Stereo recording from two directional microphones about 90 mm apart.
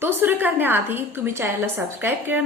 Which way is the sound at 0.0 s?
25° right (ahead or behind).